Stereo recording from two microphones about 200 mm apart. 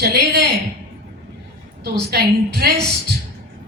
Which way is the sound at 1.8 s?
55° right (ahead or behind).